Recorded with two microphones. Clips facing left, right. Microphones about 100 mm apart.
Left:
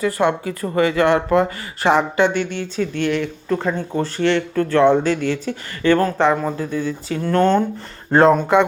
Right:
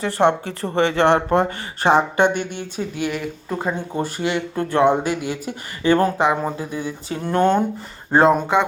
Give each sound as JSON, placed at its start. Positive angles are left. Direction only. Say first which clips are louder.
{"t": 0.0, "sound": "speech", "louder": "even", "side_deg": -30}